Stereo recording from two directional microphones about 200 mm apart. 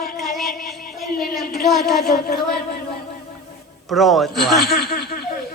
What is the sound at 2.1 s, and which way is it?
Speech, 50° left (ahead or behind).